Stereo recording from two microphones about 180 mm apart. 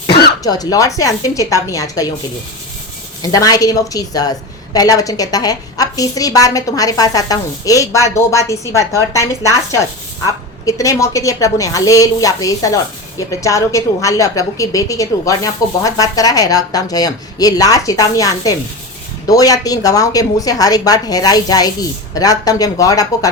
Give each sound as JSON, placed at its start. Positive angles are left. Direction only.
{"t": 0.4, "sound": "a woman's voice", "side_deg": 20}
{"t": 3.3, "sound": "a woman's voice", "side_deg": 20}